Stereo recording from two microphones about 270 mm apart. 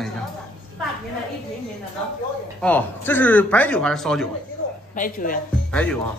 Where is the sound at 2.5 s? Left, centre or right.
Centre.